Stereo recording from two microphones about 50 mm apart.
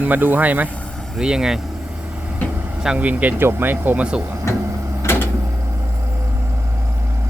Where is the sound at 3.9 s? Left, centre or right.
Right.